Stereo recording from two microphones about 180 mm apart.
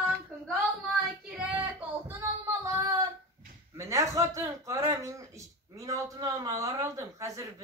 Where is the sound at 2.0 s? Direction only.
15° right (ahead or behind).